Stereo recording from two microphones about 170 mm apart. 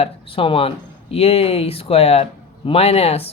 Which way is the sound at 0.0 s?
35° left (ahead or behind).